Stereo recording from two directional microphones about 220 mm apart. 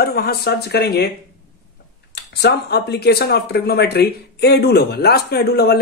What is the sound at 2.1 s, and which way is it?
Speech, 50° left (ahead or behind).